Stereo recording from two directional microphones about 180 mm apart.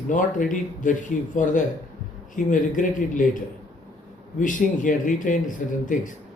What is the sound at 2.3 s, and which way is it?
Speech, 45° left (ahead or behind).